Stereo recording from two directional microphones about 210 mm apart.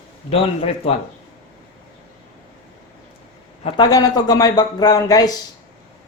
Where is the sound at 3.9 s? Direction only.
20° left (ahead or behind).